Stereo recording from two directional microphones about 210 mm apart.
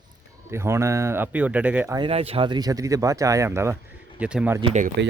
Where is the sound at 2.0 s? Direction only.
30° right (ahead or behind); by 4.6 s 5° right (ahead or behind).